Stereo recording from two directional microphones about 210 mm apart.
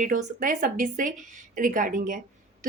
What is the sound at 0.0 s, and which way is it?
A woman's voice, 40° right (ahead or behind).